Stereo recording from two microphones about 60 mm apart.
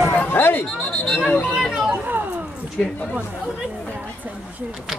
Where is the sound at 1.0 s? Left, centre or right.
Centre.